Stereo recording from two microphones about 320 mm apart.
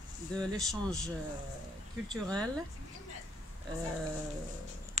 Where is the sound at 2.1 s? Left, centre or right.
Centre.